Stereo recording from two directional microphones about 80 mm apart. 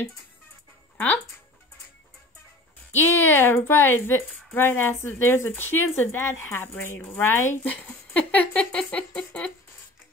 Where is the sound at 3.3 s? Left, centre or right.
Left.